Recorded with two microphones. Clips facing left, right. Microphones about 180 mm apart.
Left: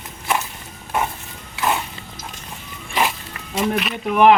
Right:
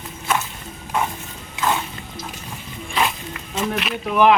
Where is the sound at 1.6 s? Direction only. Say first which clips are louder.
Even; 20° right (ahead or behind).